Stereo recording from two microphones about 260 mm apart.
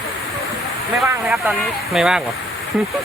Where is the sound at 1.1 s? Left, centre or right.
Centre.